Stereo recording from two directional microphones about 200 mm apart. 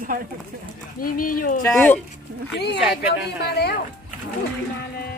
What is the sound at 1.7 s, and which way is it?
Music, 10° left (ahead or behind).